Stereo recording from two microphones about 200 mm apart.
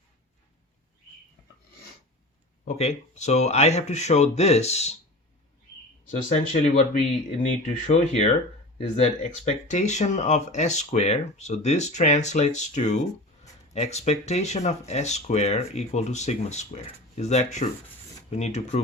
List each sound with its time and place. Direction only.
2.6 s speech: 35° left (ahead or behind)
6.1 s speech: 35° left (ahead or behind)